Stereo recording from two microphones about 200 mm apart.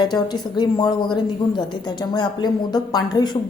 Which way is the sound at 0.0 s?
20° left (ahead or behind).